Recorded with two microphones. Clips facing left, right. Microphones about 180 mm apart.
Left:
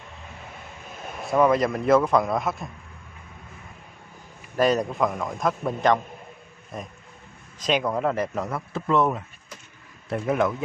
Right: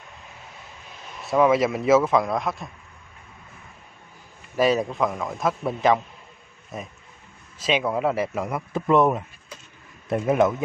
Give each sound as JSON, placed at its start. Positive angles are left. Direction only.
{"t": 1.2, "sound": "a man's voice", "side_deg": 0}
{"t": 4.6, "sound": "a man's voice", "side_deg": 0}